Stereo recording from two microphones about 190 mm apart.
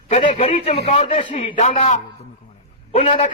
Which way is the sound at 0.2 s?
30° left (ahead or behind).